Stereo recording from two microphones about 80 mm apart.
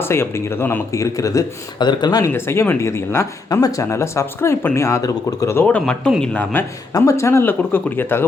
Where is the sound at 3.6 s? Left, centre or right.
Left.